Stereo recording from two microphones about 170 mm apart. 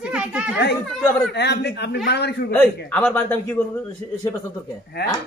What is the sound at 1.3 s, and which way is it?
Speech, 75° left (ahead or behind).